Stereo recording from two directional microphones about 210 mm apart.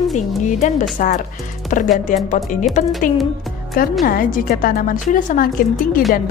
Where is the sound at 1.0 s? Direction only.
40° left (ahead or behind).